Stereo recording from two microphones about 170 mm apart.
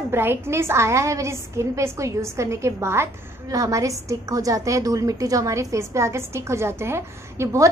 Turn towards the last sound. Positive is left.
turn(degrees=-15)  # may be behind; listen again after turning